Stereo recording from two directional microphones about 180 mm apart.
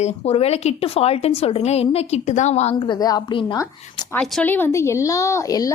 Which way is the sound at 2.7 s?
25° left (ahead or behind).